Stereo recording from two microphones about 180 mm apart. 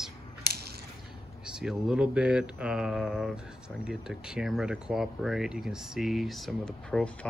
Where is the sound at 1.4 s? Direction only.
5° right (ahead or behind).